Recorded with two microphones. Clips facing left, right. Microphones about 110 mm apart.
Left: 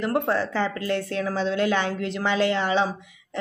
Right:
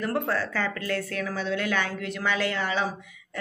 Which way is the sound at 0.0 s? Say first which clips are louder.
Left 4 dB; 20° left (ahead or behind).